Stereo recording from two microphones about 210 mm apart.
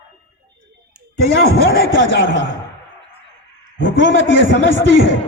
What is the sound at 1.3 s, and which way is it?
Speech, 50° left (ahead or behind).